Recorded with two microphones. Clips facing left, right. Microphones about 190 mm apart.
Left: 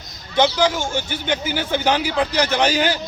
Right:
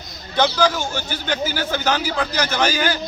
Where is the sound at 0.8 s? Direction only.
20° left (ahead or behind).